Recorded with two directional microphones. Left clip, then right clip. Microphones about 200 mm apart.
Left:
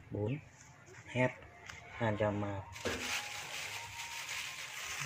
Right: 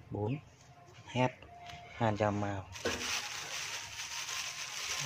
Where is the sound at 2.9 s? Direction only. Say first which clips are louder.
Even; 60° right (ahead or behind).